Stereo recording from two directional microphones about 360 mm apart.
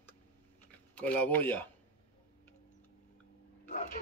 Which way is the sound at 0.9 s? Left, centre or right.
Centre.